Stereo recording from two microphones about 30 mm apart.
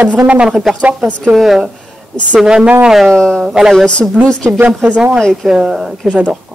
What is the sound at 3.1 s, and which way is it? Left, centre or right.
Speech, centre.